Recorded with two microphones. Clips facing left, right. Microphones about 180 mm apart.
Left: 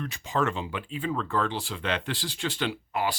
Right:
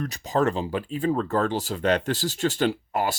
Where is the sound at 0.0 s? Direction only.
40° right (ahead or behind).